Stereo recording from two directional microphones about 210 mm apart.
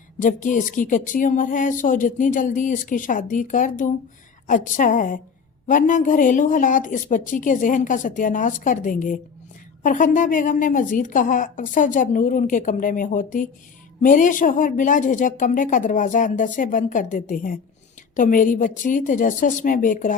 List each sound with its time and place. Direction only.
0.2 s speech: 40° left (ahead or behind)